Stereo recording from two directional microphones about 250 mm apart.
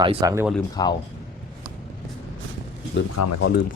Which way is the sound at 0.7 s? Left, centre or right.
Centre.